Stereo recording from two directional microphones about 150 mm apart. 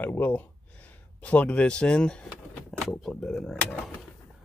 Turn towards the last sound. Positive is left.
turn(degrees=0)  # may be behind; listen again after turning